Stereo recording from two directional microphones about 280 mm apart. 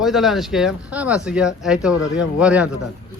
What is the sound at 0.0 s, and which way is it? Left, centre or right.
A man's voice, centre.